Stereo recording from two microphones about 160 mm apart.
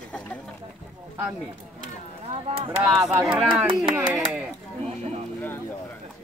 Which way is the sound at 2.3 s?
35° right (ahead or behind).